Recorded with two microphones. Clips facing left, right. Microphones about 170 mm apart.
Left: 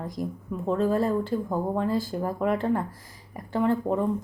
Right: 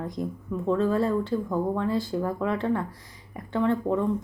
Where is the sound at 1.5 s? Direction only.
40° left (ahead or behind).